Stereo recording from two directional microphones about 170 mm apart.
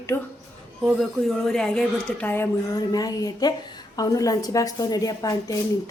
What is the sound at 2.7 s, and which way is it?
A woman's voice, 20° left (ahead or behind).